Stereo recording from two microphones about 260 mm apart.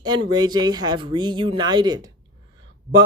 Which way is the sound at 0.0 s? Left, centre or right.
Centre.